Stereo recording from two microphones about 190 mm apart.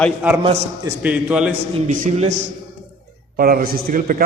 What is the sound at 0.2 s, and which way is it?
A man's voice, 5° right (ahead or behind).